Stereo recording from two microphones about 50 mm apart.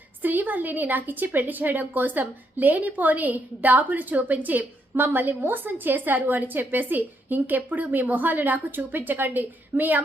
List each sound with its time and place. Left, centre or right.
0.2 s speech: right